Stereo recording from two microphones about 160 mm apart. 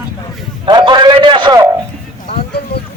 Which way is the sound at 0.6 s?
30° right (ahead or behind).